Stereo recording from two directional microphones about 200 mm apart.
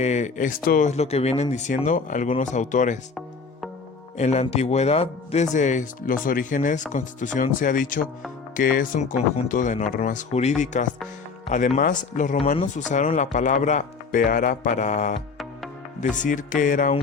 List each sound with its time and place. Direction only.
0.0 s speech: 35° left (ahead or behind)
4.2 s speech: 35° left (ahead or behind)